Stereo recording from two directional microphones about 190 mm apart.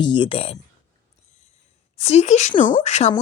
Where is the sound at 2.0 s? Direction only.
35° left (ahead or behind).